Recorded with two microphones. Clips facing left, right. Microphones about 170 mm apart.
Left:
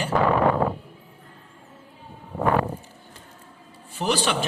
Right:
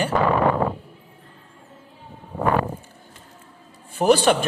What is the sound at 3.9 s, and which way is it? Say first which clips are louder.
Speech: right 8 dB; 50° right (ahead or behind).